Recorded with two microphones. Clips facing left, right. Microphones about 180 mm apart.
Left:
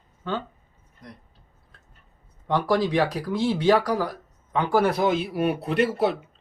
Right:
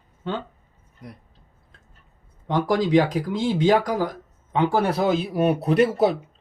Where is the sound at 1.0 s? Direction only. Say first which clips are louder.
Right 3 dB; 10° right (ahead or behind).